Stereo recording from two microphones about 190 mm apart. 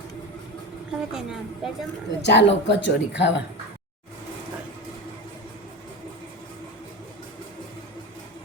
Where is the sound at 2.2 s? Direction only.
65° left (ahead or behind).